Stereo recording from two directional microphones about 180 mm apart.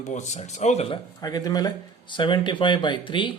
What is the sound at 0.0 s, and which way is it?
Speech, 40° left (ahead or behind).